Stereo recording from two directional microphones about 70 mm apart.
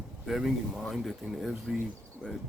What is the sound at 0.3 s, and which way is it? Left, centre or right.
Speech, centre.